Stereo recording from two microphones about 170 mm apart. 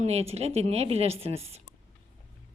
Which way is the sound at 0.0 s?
40° right (ahead or behind).